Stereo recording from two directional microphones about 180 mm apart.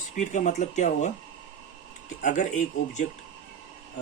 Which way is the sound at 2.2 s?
45° left (ahead or behind).